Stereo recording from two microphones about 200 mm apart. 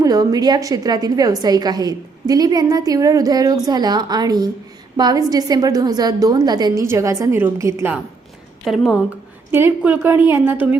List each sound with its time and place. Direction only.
0.0 s a woman's voice: 20° right (ahead or behind)
8.6 s a woman's voice: centre (ahead or behind)